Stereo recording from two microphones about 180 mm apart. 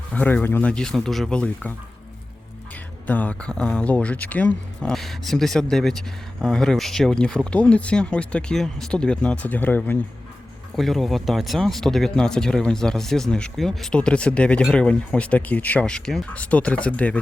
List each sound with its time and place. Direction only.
0.1 s speech: 10° left (ahead or behind)
3.1 s speech: 10° left (ahead or behind)